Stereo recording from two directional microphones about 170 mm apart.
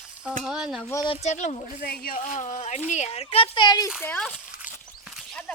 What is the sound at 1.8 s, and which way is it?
A child's voice, 65° left (ahead or behind).